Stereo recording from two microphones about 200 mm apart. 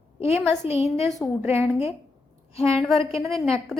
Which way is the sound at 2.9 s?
30° left (ahead or behind).